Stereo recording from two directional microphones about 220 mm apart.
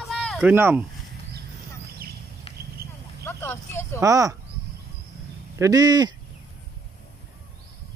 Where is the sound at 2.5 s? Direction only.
25° left (ahead or behind).